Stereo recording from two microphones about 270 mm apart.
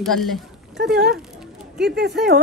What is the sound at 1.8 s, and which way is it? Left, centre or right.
Speech, right.